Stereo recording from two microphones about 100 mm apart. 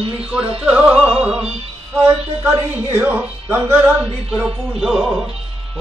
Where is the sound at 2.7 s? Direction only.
20° right (ahead or behind).